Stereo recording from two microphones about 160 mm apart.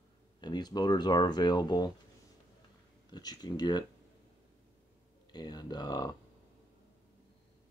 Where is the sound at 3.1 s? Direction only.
25° left (ahead or behind).